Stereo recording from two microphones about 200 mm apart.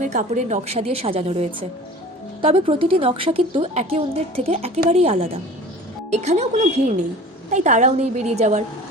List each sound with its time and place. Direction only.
0.0 s a woman's voice: 35° right (ahead or behind)